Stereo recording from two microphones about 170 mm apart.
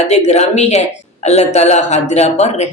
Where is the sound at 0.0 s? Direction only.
40° left (ahead or behind).